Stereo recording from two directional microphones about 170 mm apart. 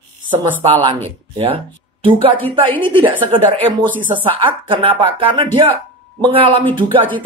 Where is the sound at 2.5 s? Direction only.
30° right (ahead or behind).